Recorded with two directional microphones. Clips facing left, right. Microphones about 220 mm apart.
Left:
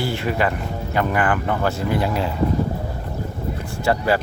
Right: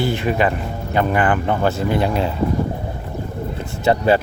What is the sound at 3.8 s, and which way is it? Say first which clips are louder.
Speech: right 4 dB; 20° right (ahead or behind).